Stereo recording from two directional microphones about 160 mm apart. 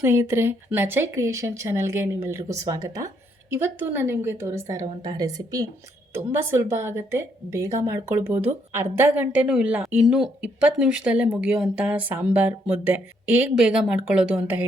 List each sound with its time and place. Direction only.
0.0 s a woman's voice: 15° right (ahead or behind)